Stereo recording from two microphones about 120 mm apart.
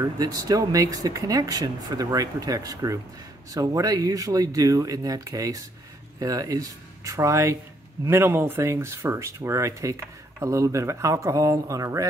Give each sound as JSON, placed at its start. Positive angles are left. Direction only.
{"t": 0.0, "sound": "speech", "side_deg": -30}